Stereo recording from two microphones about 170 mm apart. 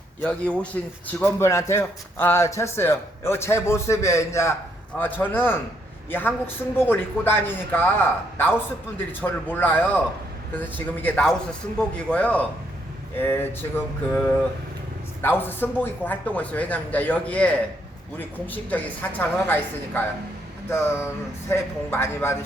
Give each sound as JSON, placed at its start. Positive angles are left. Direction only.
{"t": 0.2, "sound": "speech", "side_deg": 5}